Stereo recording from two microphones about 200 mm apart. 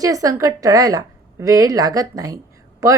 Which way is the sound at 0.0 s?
15° right (ahead or behind).